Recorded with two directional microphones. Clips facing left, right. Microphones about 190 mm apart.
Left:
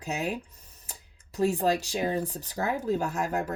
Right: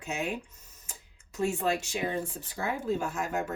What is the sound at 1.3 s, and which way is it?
Speech, 35° left (ahead or behind).